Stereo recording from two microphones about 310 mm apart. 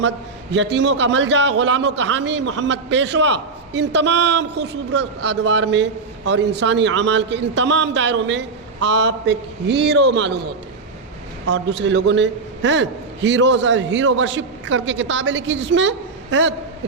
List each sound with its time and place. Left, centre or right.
0.5 s a man's voice: right
11.5 s a man's voice: right